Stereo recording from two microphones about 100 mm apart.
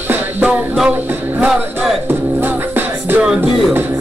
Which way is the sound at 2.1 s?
20° right (ahead or behind).